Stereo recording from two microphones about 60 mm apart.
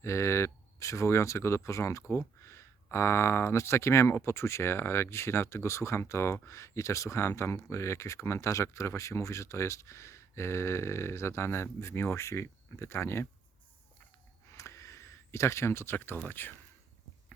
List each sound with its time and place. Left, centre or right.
0.0 s speech: left
14.5 s a sound: left
16.3 s speech: left